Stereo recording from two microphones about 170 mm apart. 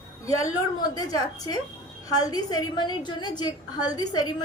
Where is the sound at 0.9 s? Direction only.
20° left (ahead or behind).